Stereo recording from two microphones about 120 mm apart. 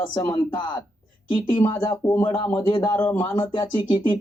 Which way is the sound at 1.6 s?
30° left (ahead or behind).